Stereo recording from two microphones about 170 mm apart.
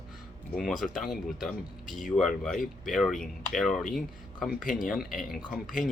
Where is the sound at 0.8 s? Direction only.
Centre (ahead or behind).